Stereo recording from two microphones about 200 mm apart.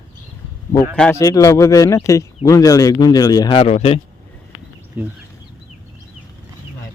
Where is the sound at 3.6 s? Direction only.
35° left (ahead or behind).